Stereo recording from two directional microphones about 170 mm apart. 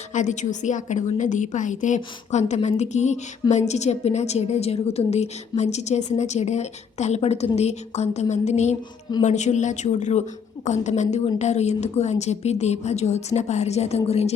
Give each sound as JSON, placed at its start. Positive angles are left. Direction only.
{"t": 0.1, "sound": "a woman's voice", "side_deg": 45}